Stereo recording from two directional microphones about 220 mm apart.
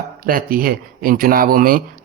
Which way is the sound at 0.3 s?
40° right (ahead or behind).